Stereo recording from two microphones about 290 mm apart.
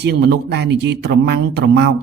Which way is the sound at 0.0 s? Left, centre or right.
Right.